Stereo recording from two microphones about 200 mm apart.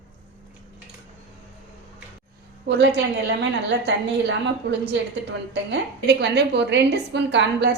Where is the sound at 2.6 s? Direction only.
60° right (ahead or behind).